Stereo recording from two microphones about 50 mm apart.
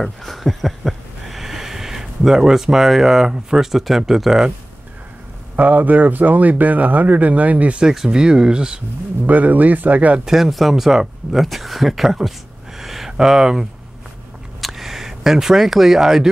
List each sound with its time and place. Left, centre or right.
0.0 s a sound: centre
5.6 s speech: right
7.8 s speech: centre
9.2 s speech: right
10.2 s speech: centre
14.6 s a sound: centre